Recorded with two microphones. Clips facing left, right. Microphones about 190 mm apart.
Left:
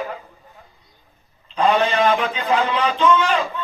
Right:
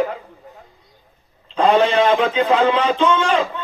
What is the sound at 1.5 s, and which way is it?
Speech, 30° right (ahead or behind).